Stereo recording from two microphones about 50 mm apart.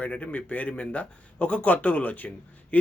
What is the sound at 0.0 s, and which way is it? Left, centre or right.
A man's voice, left.